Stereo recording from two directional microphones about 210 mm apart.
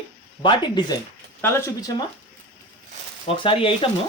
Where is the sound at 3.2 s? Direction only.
25° left (ahead or behind).